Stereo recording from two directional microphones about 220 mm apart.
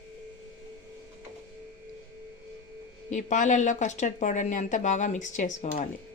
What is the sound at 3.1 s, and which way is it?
Speech, 35° left (ahead or behind).